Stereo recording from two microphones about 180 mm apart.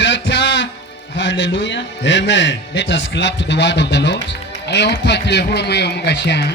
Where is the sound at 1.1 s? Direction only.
80° left.